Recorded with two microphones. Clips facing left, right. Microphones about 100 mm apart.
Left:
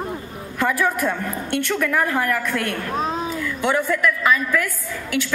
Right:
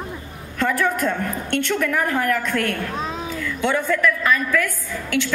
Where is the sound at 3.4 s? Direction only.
15° left (ahead or behind).